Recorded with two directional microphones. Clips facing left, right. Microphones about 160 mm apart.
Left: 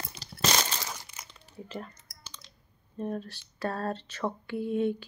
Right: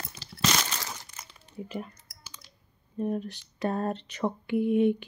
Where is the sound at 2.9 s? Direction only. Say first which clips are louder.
Right 4 dB; 15° right (ahead or behind).